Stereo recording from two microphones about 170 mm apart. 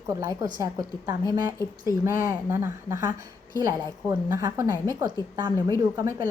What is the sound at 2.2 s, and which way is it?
A woman's voice, 15° right (ahead or behind).